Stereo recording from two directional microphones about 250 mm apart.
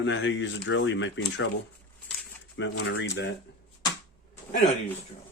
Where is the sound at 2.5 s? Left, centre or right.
Left.